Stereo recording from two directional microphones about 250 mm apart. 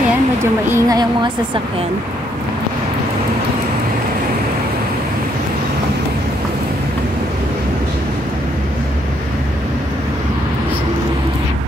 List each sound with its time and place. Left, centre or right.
0.4 s a woman's voice: centre